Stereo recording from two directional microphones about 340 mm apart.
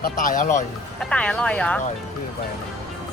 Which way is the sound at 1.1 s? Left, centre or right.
Centre.